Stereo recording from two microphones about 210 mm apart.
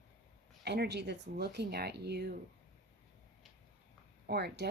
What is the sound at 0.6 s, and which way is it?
Speech, 50° right (ahead or behind).